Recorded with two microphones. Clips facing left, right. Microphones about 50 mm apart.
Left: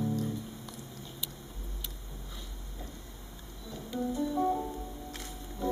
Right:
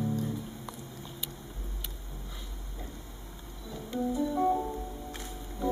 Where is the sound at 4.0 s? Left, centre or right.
Centre.